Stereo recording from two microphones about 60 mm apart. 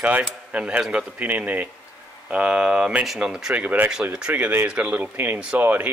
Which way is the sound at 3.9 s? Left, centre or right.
Centre.